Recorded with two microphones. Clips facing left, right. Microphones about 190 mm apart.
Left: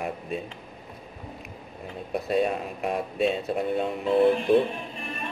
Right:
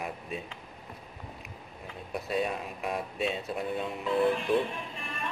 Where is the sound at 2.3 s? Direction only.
55° left (ahead or behind).